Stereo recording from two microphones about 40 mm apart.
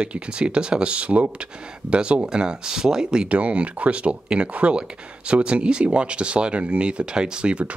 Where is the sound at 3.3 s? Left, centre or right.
Right.